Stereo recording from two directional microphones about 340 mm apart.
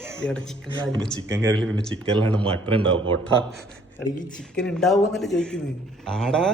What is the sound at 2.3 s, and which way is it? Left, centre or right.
Speech, centre.